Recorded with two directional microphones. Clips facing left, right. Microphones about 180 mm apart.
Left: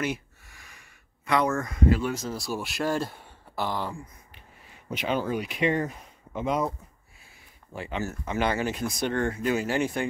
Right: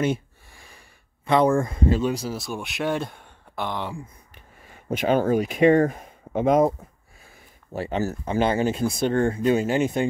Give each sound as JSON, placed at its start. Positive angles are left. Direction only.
{"t": 0.0, "sound": "a sound", "side_deg": -30}
{"t": 2.3, "sound": "speech", "side_deg": 0}
{"t": 4.6, "sound": "speech", "side_deg": -45}
{"t": 7.2, "sound": "speech", "side_deg": -40}